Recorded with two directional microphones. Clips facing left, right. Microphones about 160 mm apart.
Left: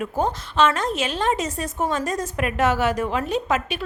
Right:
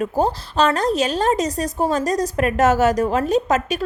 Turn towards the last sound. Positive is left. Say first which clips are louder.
# right 5 dB
turn(degrees=-40)  # may be behind; listen again after turning